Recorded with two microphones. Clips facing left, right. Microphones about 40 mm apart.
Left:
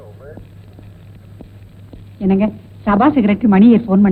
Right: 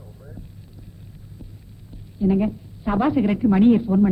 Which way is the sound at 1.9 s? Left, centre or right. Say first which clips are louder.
Left 5 dB; left.